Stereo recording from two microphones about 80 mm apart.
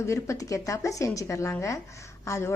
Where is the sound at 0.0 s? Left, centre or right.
Left.